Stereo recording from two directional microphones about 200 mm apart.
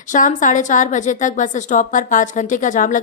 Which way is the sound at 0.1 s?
40° left (ahead or behind).